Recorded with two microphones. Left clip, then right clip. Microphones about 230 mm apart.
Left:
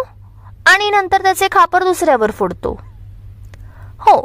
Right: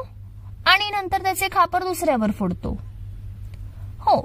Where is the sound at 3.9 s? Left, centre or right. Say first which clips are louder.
Left 9 dB; left.